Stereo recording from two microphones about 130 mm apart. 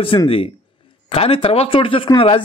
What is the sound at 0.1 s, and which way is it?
A man's voice, 45° left (ahead or behind).